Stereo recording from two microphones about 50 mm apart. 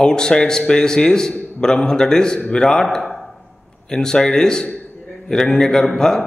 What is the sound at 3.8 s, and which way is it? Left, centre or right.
A man's voice, centre.